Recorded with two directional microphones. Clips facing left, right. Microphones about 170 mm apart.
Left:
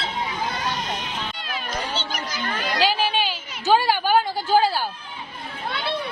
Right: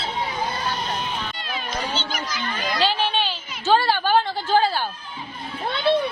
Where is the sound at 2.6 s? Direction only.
10° left (ahead or behind).